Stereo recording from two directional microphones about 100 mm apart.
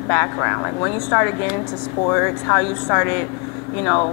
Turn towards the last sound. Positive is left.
turn(degrees=20)  # may be behind; listen again after turning